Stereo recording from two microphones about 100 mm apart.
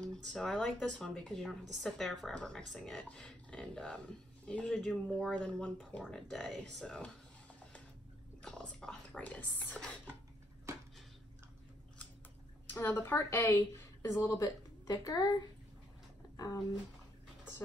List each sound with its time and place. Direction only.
0.0 s speech: 10° left (ahead or behind)
8.4 s speech: 10° left (ahead or behind)
12.6 s a woman's voice: 20° left (ahead or behind)
14.4 s a woman's voice: 40° left (ahead or behind)